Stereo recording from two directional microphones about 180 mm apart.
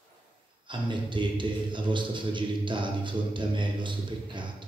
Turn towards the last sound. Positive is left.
turn(degrees=-25)  # may be behind; listen again after turning